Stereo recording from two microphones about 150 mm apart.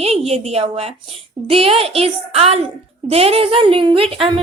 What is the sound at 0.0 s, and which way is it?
A woman's voice, 40° right (ahead or behind).